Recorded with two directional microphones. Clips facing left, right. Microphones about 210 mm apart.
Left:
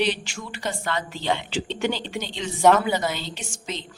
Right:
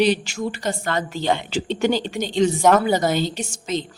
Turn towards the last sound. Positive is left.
turn(degrees=-45)  # may be behind; listen again after turning